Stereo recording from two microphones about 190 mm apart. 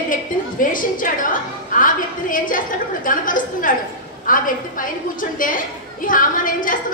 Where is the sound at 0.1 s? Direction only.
45° left (ahead or behind).